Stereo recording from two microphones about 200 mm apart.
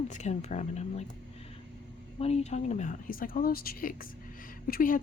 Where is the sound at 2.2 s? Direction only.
30° left (ahead or behind).